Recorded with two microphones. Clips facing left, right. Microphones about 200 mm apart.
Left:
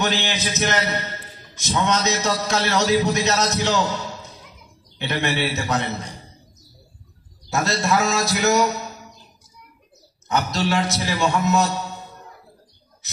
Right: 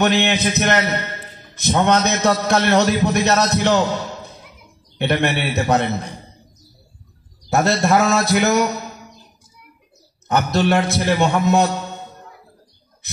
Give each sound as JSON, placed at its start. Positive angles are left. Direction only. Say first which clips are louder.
{"t": 0.0, "sound": "a man's voice", "louder": "right 7 dB", "side_deg": -60}
{"t": 7.4, "sound": "a man's voice", "louder": "right 5 dB", "side_deg": -60}
{"t": 10.2, "sound": "a man's voice", "louder": "right 5 dB", "side_deg": -60}